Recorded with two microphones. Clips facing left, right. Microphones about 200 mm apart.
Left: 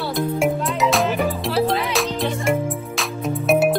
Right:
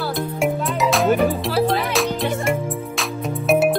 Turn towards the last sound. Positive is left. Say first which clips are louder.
# even
turn(degrees=0)  # may be behind; listen again after turning